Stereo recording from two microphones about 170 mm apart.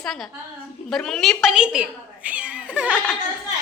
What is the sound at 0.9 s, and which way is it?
A woman's voice, centre (ahead or behind).